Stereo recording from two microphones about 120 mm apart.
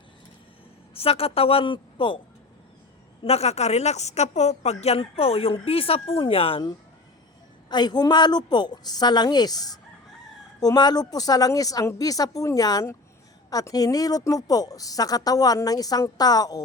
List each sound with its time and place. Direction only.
0.9 s a woman's voice: 55° left (ahead or behind)
3.2 s a woman's voice: 60° left (ahead or behind); by 16.6 s 30° left (ahead or behind)